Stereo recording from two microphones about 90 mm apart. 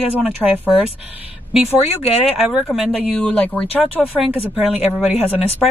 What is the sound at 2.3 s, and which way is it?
Speech, 5° right (ahead or behind).